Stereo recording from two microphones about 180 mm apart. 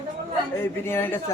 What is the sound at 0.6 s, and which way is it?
Speech, 15° left (ahead or behind).